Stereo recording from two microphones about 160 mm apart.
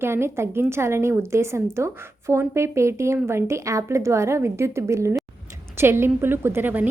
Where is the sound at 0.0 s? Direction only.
15° right (ahead or behind).